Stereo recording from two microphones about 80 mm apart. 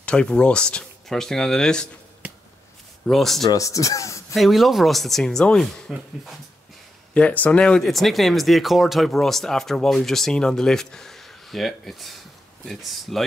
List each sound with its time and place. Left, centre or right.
0.0 s speech: centre
3.1 s speech: centre
3.4 s speech: left
4.3 s speech: centre
7.2 s speech: centre
7.8 s speech: centre